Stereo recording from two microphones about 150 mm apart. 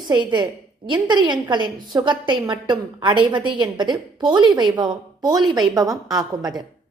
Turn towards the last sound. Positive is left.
turn(degrees=-25)  # may be behind; listen again after turning